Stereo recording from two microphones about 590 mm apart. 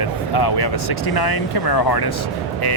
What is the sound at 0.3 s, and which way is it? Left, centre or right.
Speech, left.